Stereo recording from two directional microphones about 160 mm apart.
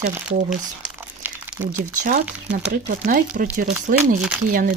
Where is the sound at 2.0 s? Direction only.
50° right (ahead or behind).